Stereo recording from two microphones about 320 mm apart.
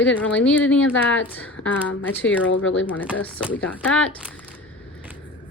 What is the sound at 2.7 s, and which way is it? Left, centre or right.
Speech, centre.